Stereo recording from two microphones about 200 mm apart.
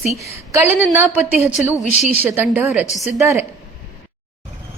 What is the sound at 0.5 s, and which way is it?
A woman's voice, 10° right (ahead or behind).